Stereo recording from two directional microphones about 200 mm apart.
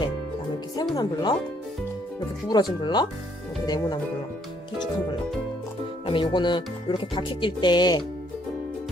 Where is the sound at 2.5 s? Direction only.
20° left (ahead or behind).